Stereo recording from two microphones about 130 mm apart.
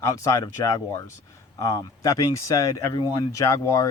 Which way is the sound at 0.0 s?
25° left (ahead or behind).